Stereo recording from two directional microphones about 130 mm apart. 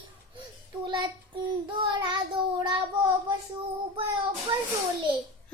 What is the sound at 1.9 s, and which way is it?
Child singing, 35° right (ahead or behind).